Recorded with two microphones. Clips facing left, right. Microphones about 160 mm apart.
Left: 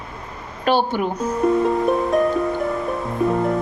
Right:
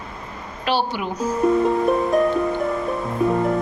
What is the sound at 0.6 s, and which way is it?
Speech, 50° left (ahead or behind).